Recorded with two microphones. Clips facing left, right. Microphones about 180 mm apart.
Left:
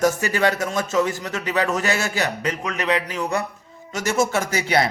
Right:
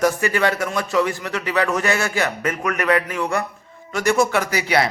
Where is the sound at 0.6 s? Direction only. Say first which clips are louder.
Even; 20° left (ahead or behind).